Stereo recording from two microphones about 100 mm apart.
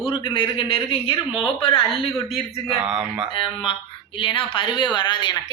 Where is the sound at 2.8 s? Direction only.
10° right (ahead or behind).